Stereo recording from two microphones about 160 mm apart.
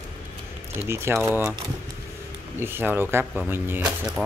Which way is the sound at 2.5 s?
15° right (ahead or behind).